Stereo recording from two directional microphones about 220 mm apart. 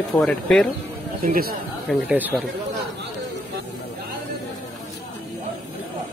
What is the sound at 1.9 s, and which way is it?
Speech, 5° right (ahead or behind).